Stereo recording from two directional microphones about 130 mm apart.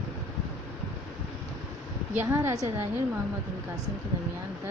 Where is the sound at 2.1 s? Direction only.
20° right (ahead or behind).